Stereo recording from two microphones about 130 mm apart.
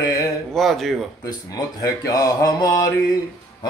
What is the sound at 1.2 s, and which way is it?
Speech, 30° left (ahead or behind).